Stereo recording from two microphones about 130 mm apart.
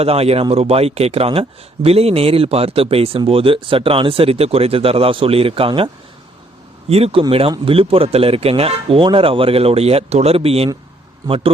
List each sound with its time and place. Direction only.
0.0 s speech: 50° right (ahead or behind)